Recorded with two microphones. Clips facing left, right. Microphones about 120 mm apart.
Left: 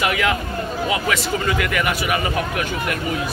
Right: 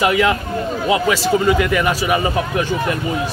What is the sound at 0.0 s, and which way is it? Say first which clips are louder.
Speech: right 5 dB; 25° right (ahead or behind).